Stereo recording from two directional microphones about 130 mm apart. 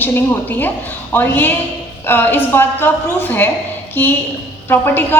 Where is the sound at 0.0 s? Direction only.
15° left (ahead or behind).